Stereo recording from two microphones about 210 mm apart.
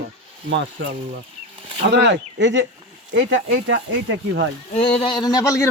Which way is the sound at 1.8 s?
55° right (ahead or behind).